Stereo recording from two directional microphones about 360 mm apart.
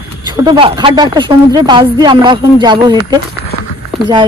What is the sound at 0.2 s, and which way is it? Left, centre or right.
Speech, centre.